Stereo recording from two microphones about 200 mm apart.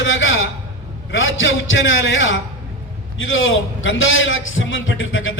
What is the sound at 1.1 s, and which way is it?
A man's voice, 70° left (ahead or behind).